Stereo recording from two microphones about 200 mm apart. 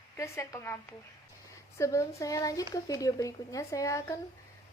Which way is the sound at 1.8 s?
15° left (ahead or behind).